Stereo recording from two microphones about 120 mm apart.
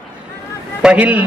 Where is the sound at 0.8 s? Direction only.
10° right (ahead or behind).